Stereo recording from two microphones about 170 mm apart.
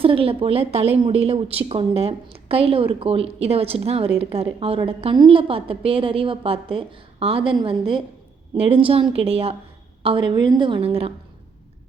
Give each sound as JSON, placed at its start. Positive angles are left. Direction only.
{"t": 0.0, "sound": "a woman's voice", "side_deg": -35}